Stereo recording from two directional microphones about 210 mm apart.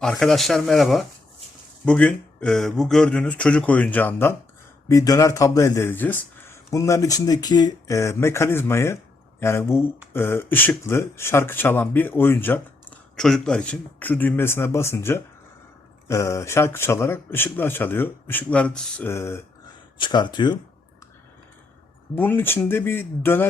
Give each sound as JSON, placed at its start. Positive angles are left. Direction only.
{"t": 0.0, "sound": "speech", "side_deg": 0}
{"t": 22.1, "sound": "speech", "side_deg": 10}